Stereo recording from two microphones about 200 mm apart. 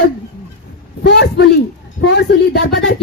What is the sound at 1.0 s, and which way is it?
Speech, 55° left (ahead or behind).